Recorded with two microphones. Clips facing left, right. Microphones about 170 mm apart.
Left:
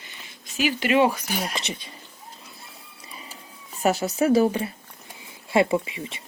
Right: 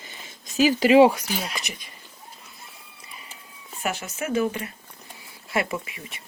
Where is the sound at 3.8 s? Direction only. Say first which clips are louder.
Left 8 dB; 35° left (ahead or behind).